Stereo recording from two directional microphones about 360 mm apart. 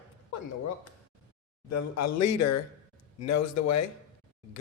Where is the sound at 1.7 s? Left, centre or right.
Left.